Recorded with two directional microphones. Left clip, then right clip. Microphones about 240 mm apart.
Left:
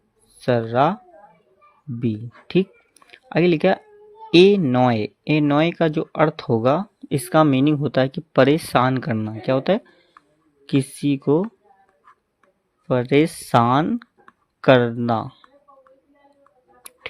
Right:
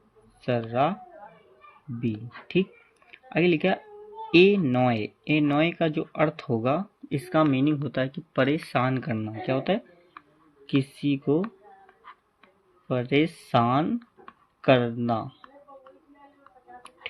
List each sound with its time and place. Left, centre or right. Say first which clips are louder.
0.3 s speech: left 7 dB; left
2.0 s speech: left 5 dB; left
12.9 s speech: left 7 dB; left